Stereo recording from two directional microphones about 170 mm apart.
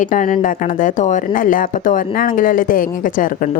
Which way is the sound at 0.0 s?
50° left (ahead or behind).